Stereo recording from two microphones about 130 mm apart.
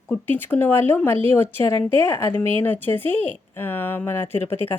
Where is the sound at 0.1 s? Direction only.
15° left (ahead or behind).